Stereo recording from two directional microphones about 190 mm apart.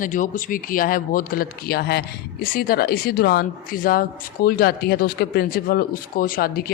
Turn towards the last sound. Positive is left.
turn(degrees=50)  # may be behind; listen again after turning